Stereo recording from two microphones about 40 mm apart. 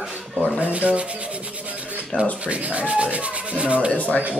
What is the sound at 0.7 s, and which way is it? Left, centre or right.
Rub, right.